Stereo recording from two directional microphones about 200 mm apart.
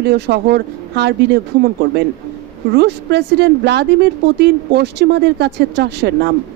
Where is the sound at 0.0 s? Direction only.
55° right (ahead or behind).